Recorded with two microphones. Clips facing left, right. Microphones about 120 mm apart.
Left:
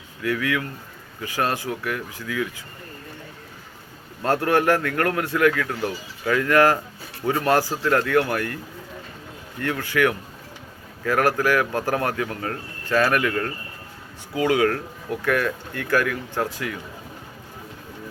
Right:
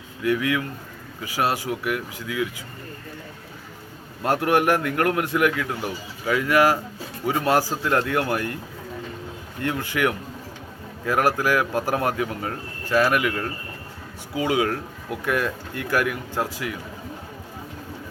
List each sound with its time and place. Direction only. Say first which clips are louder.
0.3 s a man's voice: right 2 dB; 20° right (ahead or behind)
4.2 s a man's voice: even; 15° right (ahead or behind)
9.6 s a man's voice: left 2 dB; 20° right (ahead or behind)